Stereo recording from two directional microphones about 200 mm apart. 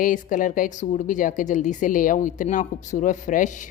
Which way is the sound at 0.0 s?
40° left (ahead or behind).